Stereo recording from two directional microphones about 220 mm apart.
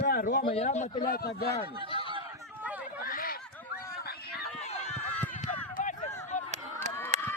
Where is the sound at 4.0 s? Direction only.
45° left (ahead or behind).